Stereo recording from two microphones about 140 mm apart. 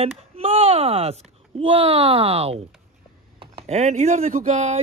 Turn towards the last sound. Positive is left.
turn(degrees=-55)  # may be behind; listen again after turning